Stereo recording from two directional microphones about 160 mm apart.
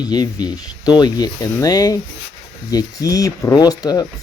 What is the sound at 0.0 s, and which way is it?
Speech, 25° left (ahead or behind).